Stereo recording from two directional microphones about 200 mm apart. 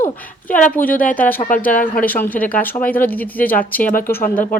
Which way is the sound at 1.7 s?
45° left (ahead or behind).